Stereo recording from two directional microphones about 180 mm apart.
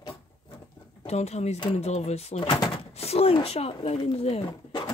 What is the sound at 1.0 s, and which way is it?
Speech, 35° left (ahead or behind).